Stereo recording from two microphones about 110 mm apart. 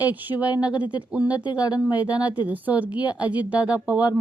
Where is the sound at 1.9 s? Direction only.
15° right (ahead or behind).